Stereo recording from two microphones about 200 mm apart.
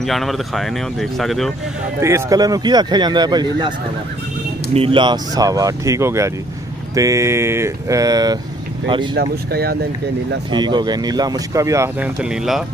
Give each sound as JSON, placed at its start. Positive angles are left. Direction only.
{"t": 0.0, "sound": "speech", "side_deg": 0}
{"t": 2.0, "sound": "speech", "side_deg": -15}
{"t": 4.7, "sound": "speech", "side_deg": -25}
{"t": 9.1, "sound": "speech", "side_deg": -50}
{"t": 10.5, "sound": "speech", "side_deg": -20}